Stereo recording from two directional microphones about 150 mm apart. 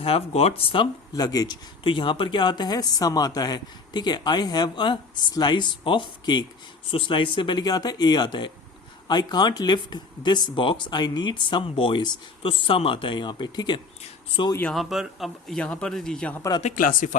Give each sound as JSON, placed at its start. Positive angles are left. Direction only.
{"t": 0.0, "sound": "speech", "side_deg": 45}
{"t": 14.7, "sound": "a man's voice", "side_deg": 0}
{"t": 16.7, "sound": "speech", "side_deg": 65}